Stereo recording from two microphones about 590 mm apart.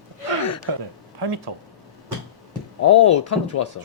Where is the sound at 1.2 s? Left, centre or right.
Right.